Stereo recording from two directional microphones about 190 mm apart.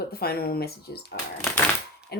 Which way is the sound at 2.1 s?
60° left (ahead or behind).